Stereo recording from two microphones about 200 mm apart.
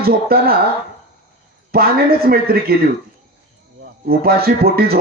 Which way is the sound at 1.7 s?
50° right (ahead or behind).